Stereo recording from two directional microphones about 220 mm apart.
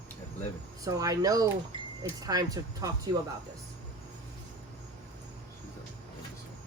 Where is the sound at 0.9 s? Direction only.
15° right (ahead or behind).